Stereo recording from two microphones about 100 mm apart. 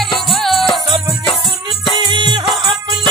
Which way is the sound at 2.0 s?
50° right (ahead or behind).